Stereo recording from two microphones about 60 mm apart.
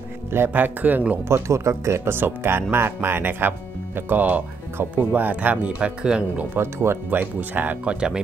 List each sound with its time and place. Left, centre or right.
0.5 s speech: right
1.3 s speech: right; by 6.4 s centre
6.6 s speech: right
7.1 s speech: right
7.8 s speech: centre